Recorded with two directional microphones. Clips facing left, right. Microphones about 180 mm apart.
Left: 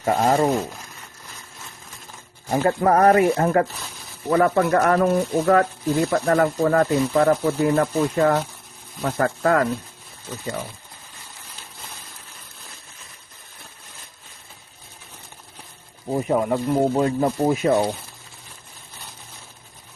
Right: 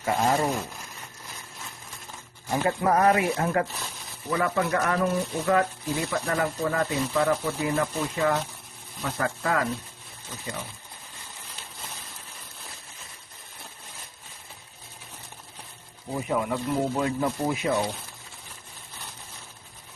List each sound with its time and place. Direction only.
0.0 s speech: 50° left (ahead or behind)
2.6 s speech: 50° left (ahead or behind)
16.1 s speech: 40° left (ahead or behind)